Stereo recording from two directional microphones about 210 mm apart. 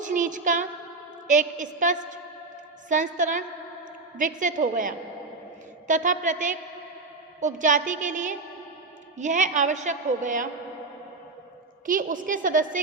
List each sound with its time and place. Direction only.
0.0 s child singing: 40° right (ahead or behind)
1.3 s a woman's voice: 35° right (ahead or behind)
11.9 s a woman's voice: 40° right (ahead or behind)